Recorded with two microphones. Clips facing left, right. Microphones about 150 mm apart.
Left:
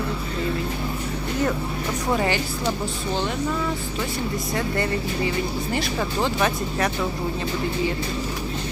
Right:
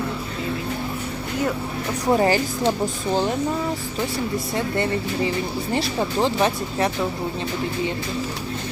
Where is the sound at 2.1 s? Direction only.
35° right (ahead or behind).